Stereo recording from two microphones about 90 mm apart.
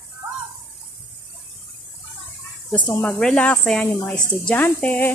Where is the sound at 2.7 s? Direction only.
20° left (ahead or behind).